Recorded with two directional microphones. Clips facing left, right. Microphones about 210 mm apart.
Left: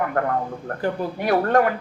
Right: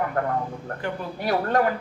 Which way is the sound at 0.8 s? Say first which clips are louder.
Left 7 dB; 50° left (ahead or behind).